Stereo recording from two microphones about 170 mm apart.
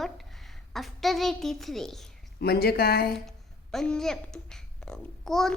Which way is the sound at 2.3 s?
65° left (ahead or behind).